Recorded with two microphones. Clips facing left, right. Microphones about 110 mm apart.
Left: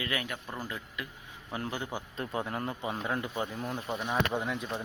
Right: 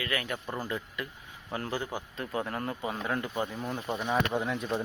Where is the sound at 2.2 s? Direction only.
20° left (ahead or behind).